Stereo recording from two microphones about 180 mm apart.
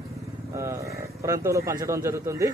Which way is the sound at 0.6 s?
15° right (ahead or behind).